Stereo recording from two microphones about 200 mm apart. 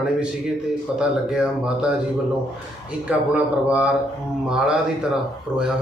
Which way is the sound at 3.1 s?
5° right (ahead or behind).